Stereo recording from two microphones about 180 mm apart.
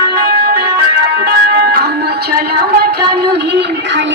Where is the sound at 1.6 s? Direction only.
55° right (ahead or behind).